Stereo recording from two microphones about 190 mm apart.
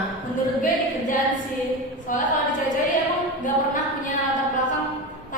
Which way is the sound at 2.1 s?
45° left (ahead or behind).